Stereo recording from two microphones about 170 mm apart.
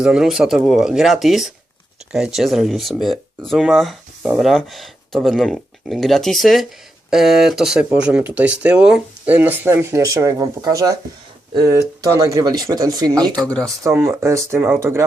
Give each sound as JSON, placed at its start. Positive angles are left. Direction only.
{"t": 0.0, "sound": "speech", "side_deg": -5}
{"t": 12.0, "sound": "speech", "side_deg": -20}
{"t": 13.4, "sound": "speech", "side_deg": 5}
{"t": 13.8, "sound": "speech", "side_deg": -15}